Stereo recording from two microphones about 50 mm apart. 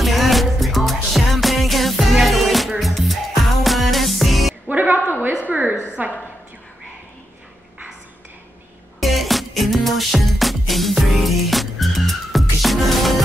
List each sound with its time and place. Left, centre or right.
0.0 s music: centre
4.6 s music: right
5.5 s a sound: right
9.0 s music: centre